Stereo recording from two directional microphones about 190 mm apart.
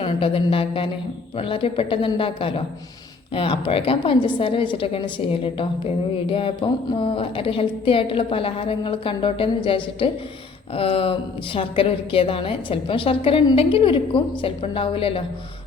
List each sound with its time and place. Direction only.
0.0 s a woman's voice: 30° left (ahead or behind)